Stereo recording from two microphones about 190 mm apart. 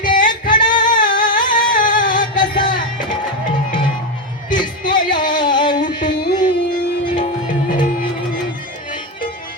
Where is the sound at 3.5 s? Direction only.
25° left (ahead or behind).